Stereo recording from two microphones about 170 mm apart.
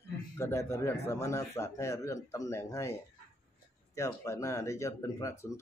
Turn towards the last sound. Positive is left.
turn(degrees=20)  # may be behind; listen again after turning